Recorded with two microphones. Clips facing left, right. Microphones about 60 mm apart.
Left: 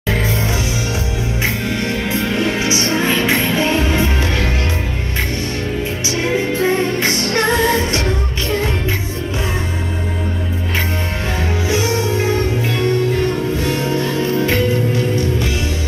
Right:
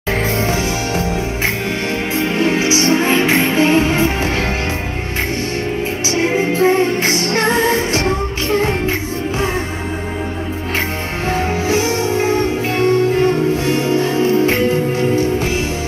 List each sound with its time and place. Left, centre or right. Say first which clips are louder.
0.1 s music: right 2 dB; right
2.2 s music: right 4 dB; right
6.0 s music: right 2 dB; right
11.7 s music: even; right
13.6 s music: right 3 dB; right